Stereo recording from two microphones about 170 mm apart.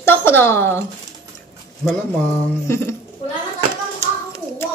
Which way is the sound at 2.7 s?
15° left (ahead or behind).